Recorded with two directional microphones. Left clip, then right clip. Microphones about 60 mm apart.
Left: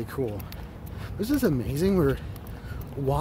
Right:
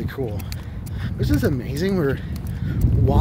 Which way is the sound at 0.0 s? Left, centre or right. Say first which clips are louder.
Right 2 dB; centre.